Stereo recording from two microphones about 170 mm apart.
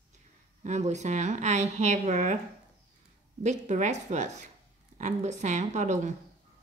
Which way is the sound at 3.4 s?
45° right (ahead or behind).